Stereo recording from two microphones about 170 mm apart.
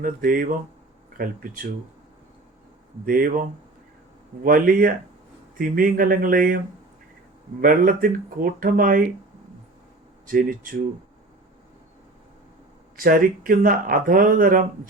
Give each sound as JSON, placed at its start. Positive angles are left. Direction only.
{"t": 0.2, "sound": "speech", "side_deg": -55}
{"t": 3.1, "sound": "speech", "side_deg": -55}
{"t": 4.4, "sound": "speech", "side_deg": -55}
{"t": 7.6, "sound": "speech", "side_deg": -55}
{"t": 10.2, "sound": "speech", "side_deg": -55}
{"t": 13.0, "sound": "speech", "side_deg": -55}